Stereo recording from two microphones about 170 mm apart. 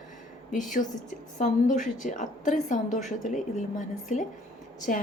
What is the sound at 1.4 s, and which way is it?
A woman's voice, 45° left (ahead or behind).